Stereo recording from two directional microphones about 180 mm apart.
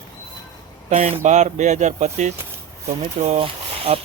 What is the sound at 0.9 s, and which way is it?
A man's voice, 40° right (ahead or behind).